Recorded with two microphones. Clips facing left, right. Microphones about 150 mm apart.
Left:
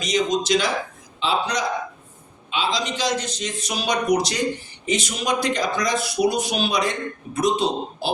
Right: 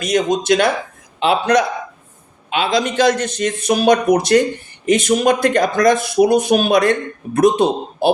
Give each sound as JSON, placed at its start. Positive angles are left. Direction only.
{"t": 0.0, "sound": "speech", "side_deg": -55}